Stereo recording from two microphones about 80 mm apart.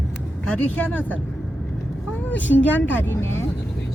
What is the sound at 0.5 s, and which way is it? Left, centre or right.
Speech, left.